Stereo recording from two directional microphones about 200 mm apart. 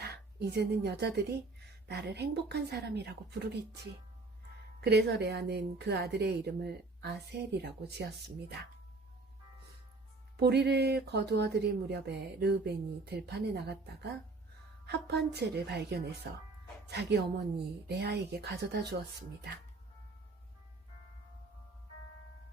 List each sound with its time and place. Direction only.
0.0 s a woman's voice: 55° right (ahead or behind)
4.8 s speech: 55° right (ahead or behind)
10.4 s speech: 55° right (ahead or behind)